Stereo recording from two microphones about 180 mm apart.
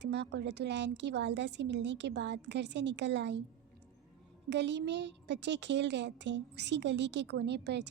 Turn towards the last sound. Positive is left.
turn(degrees=-70)  # may be behind; listen again after turning